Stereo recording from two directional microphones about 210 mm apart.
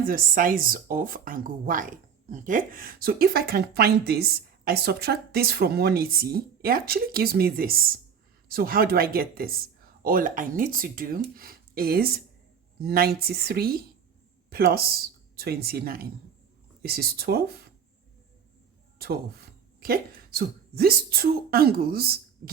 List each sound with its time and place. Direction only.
0.0 s speech: 45° right (ahead or behind)
18.9 s speech: 45° right (ahead or behind)